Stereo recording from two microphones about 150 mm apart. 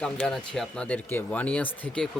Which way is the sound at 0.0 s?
5° left (ahead or behind).